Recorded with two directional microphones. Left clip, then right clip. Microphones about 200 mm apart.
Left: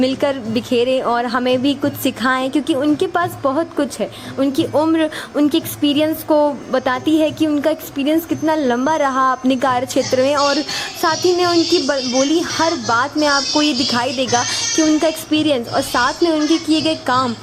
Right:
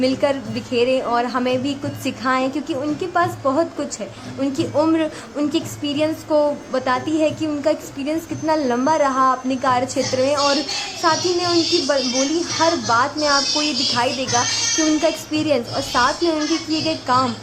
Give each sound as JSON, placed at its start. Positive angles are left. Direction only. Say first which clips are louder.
{"t": 0.2, "sound": "a woman's voice", "louder": "left 2 dB", "side_deg": 25}
{"t": 9.0, "sound": "a woman's voice", "louder": "left 1 dB", "side_deg": 30}
{"t": 10.0, "sound": "a child's voice", "louder": "left 3 dB", "side_deg": 0}
{"t": 15.3, "sound": "a woman's voice", "louder": "left 3 dB", "side_deg": 20}
{"t": 15.7, "sound": "a child's voice", "louder": "left 2 dB", "side_deg": 0}